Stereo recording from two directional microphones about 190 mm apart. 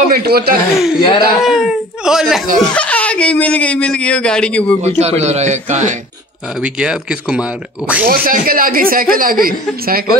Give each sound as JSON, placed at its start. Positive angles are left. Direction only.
{"t": 0.1, "sound": "speech", "side_deg": -55}
{"t": 0.7, "sound": "speech", "side_deg": 0}
{"t": 4.8, "sound": "a man's voice", "side_deg": -35}
{"t": 6.5, "sound": "speech", "side_deg": -5}
{"t": 8.1, "sound": "speech", "side_deg": -50}